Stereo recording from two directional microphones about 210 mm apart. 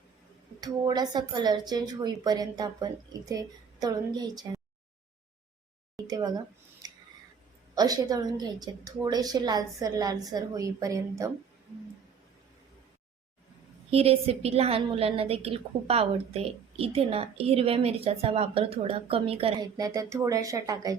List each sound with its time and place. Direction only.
0.6 s a woman's voice: 20° right (ahead or behind)
6.1 s a woman's voice: 20° right (ahead or behind)
7.8 s a woman's voice: 20° right (ahead or behind)
13.9 s a woman's voice: 30° right (ahead or behind)